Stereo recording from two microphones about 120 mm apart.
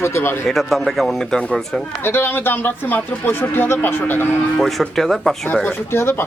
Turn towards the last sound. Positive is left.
turn(degrees=20)  # may be behind; listen again after turning